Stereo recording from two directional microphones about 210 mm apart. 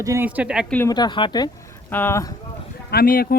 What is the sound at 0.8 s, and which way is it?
Speech, 20° left (ahead or behind).